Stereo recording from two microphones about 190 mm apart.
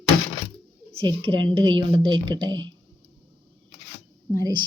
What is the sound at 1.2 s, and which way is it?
Speech, 25° right (ahead or behind).